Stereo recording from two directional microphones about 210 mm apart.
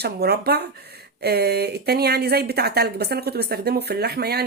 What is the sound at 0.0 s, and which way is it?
Speech, 50° right (ahead or behind).